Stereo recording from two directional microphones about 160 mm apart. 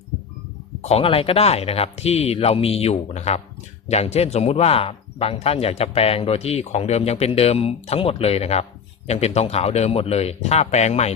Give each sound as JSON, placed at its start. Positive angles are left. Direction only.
{"t": 0.8, "sound": "speech", "side_deg": 40}